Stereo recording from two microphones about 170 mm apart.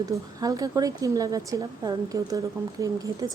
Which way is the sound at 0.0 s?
20° right (ahead or behind).